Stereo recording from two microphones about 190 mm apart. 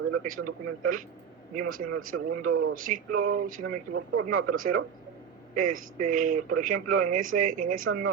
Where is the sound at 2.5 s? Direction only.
90° right.